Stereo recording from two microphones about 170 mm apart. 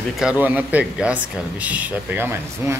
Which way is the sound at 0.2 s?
10° right (ahead or behind).